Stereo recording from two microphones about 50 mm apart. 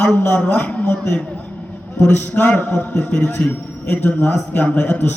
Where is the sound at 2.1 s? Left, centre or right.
Left.